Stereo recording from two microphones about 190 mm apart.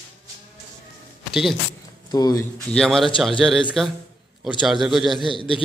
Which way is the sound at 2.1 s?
20° left (ahead or behind).